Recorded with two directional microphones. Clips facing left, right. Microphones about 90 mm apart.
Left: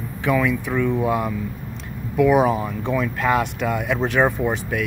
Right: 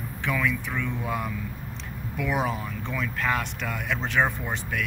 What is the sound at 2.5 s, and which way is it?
Speech, 65° left (ahead or behind).